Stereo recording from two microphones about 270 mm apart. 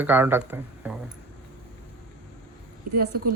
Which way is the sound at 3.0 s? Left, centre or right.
Right.